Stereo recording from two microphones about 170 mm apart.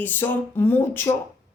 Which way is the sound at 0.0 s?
10° left (ahead or behind).